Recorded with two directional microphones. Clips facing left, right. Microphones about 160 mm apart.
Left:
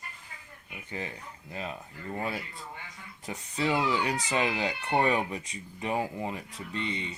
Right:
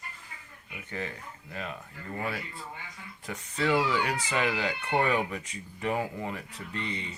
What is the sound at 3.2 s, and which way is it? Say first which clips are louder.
Speech: right 1 dB; 15° left (ahead or behind).